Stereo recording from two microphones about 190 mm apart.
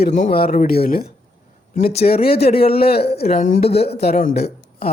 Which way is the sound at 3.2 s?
45° left (ahead or behind).